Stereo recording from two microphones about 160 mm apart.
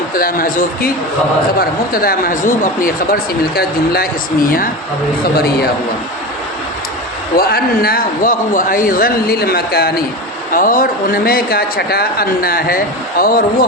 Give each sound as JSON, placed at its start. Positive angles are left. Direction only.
{"t": 0.1, "sound": "speech", "side_deg": 65}
{"t": 1.9, "sound": "speech", "side_deg": 65}
{"t": 7.3, "sound": "a man's voice", "side_deg": 70}
{"t": 10.5, "sound": "a man's voice", "side_deg": 60}